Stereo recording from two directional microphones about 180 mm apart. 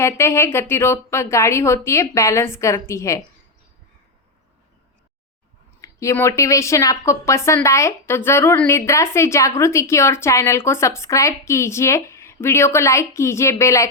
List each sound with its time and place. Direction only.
0.0 s a woman's voice: 15° left (ahead or behind)
5.8 s a woman's voice: 15° left (ahead or behind)